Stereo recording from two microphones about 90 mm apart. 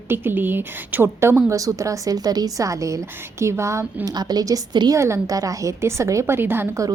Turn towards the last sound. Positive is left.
turn(degrees=-25)  # may be behind; listen again after turning